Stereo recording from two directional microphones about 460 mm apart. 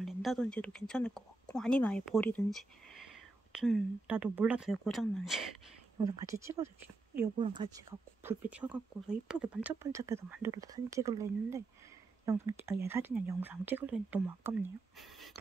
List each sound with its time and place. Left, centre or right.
0.0 s speech: centre